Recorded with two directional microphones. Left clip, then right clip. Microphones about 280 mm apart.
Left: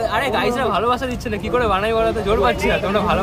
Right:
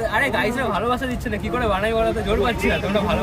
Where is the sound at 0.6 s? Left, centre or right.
Centre.